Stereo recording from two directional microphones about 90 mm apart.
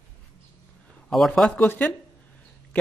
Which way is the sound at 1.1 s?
Centre (ahead or behind).